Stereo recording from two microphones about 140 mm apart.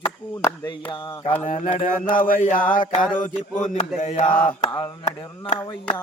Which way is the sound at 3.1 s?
60° left (ahead or behind).